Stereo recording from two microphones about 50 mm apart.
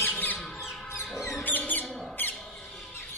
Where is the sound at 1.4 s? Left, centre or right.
Left.